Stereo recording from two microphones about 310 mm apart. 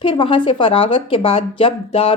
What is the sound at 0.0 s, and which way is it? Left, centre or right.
A woman's voice, centre.